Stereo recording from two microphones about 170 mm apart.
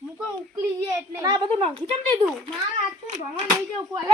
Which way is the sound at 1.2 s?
25° right (ahead or behind).